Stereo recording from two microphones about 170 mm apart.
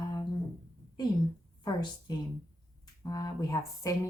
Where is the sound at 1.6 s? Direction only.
25° left (ahead or behind).